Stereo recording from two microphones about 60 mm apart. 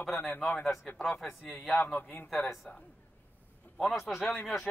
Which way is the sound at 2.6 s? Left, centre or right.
Centre.